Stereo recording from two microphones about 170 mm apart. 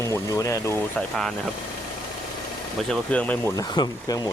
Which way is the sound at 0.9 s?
Centre (ahead or behind).